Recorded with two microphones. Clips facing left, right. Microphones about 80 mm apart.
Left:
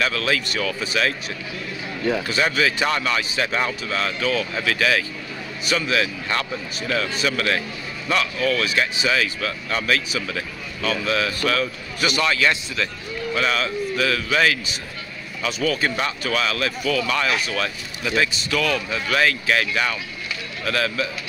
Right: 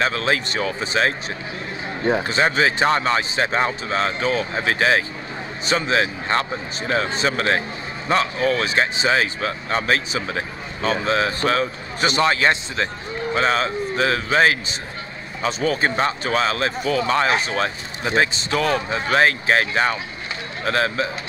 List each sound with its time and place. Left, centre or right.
0.0 s speech: right